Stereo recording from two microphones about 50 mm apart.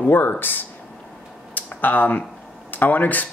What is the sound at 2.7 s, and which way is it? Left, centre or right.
Speech, left.